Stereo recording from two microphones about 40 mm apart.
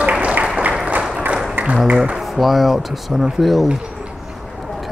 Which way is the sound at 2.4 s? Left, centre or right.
Centre.